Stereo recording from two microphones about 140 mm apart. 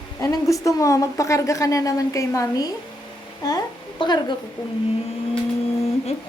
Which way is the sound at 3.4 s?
30° left (ahead or behind).